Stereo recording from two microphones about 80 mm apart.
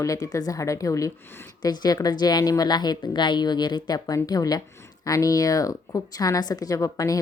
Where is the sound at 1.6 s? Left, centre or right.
Left.